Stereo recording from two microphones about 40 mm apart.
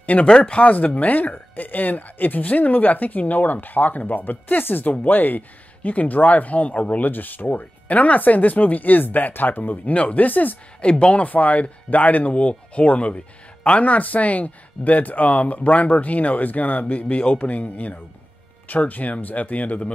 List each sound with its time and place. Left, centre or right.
0.0 s speech: left
7.1 s speech: left
10.8 s speech: left